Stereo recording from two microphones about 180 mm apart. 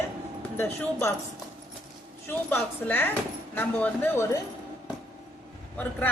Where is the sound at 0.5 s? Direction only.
10° left (ahead or behind).